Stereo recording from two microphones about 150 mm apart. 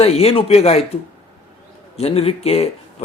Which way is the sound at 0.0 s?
40° left (ahead or behind).